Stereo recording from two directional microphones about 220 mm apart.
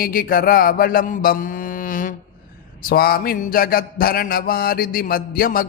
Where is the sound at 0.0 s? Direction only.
40° left (ahead or behind).